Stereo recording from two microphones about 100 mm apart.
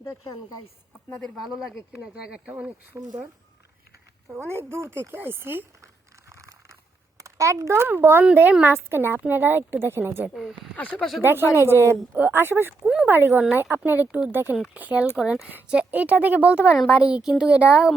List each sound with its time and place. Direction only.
1.1 s speech: 5° left (ahead or behind)
1.9 s speech: 10° right (ahead or behind)
2.9 s speech: 40° right (ahead or behind)
4.3 s a woman's voice: 25° right (ahead or behind)
6.3 s a sound: 30° right (ahead or behind)
7.2 s a woman's voice: 30° right (ahead or behind)
10.8 s speech: 15° left (ahead or behind)
11.2 s a woman's voice: 20° right (ahead or behind)
12.8 s speech: 10° right (ahead or behind)
13.1 s a woman's voice: 20° right (ahead or behind)
16.7 s speech: centre (ahead or behind)
17.0 s speech: 10° right (ahead or behind)